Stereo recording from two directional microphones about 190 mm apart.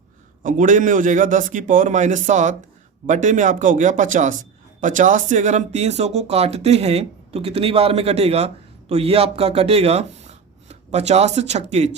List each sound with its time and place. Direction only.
0.4 s speech: 45° right (ahead or behind)